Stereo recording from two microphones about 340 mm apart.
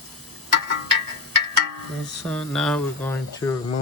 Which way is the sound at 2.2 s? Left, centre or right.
Centre.